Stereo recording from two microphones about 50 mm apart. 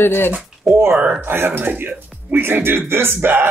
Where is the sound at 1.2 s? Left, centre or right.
Right.